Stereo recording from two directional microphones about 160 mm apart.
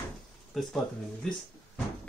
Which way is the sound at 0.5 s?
Centre (ahead or behind).